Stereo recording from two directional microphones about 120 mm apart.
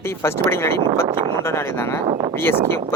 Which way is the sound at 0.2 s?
20° left (ahead or behind).